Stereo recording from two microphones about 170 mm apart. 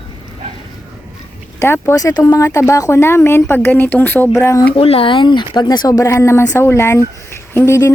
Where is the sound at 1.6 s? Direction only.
15° left (ahead or behind).